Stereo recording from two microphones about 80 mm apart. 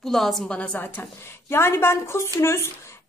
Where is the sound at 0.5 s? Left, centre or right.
Centre.